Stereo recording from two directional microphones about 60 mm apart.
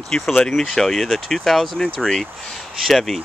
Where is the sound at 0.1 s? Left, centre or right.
Centre.